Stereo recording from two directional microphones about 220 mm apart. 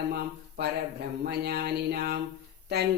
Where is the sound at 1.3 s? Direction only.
45° right (ahead or behind).